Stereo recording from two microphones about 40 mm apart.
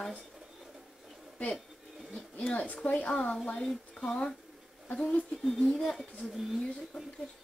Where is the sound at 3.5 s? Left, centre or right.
Centre.